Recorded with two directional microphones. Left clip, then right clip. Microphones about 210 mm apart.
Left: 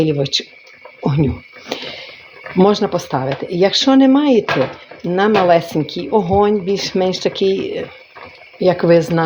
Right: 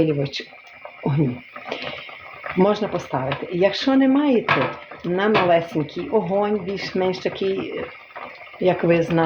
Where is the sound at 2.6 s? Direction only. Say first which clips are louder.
Left 6 dB; 45° left (ahead or behind).